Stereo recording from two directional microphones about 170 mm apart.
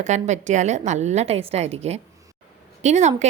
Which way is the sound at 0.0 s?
45° right (ahead or behind).